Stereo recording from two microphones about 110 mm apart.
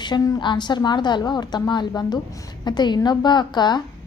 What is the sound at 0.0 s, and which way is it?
A woman's voice, 40° left (ahead or behind).